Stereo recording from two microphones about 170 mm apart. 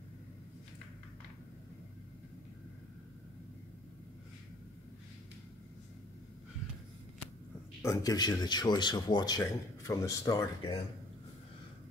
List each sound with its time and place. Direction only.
7.8 s speech: 20° left (ahead or behind)